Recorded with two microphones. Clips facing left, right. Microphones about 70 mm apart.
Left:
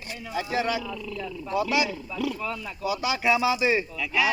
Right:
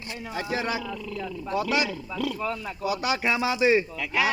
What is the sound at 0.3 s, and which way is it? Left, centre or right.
Speech, right.